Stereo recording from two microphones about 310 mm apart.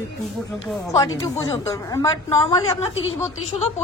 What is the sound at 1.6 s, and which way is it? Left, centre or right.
A woman's voice, centre.